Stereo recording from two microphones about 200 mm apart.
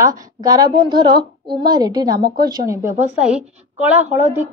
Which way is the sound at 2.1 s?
50° right (ahead or behind).